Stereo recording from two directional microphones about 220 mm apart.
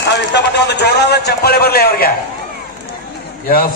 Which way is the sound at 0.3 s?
50° left (ahead or behind).